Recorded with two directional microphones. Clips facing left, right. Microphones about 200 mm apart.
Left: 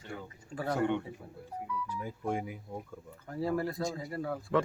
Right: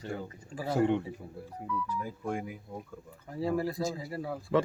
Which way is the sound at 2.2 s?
5° left (ahead or behind).